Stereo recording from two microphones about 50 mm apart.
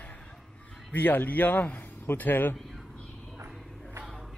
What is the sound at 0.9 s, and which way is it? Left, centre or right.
Speech, left.